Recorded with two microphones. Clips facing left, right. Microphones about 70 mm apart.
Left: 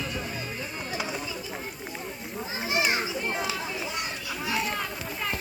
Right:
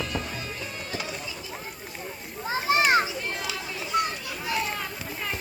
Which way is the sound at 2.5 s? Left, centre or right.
Right.